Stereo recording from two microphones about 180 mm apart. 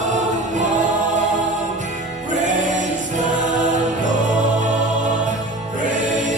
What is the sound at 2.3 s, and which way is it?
Music, 45° right (ahead or behind).